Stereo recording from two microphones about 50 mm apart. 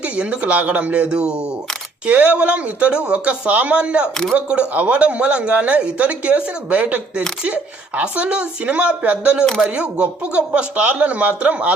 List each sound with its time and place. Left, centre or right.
0.0 s speech: right